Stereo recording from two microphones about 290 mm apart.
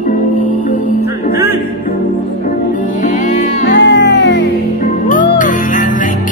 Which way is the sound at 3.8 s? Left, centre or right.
Left.